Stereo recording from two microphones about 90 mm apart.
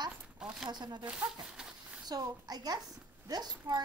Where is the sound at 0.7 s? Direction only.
50° right (ahead or behind).